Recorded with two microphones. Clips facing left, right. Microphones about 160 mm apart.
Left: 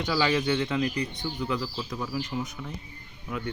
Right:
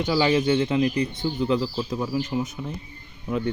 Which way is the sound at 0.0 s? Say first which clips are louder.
Right 5 dB; 25° right (ahead or behind).